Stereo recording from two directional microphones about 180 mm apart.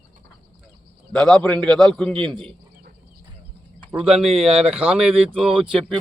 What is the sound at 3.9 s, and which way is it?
Speech, 5° right (ahead or behind).